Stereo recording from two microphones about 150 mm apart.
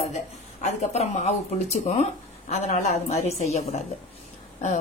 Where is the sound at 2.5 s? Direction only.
45° left (ahead or behind).